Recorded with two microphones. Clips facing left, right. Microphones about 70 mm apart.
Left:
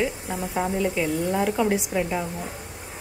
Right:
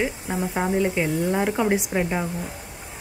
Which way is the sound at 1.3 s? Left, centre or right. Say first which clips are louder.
Even; right.